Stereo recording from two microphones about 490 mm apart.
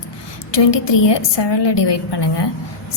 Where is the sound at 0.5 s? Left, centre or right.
Left.